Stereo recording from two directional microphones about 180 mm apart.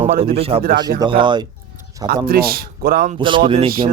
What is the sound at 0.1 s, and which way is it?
Speech, 50° right (ahead or behind).